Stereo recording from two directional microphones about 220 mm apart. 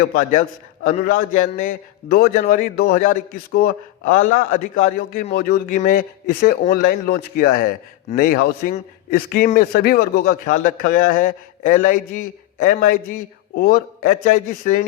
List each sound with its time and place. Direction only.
0.1 s a man's voice: 35° left (ahead or behind)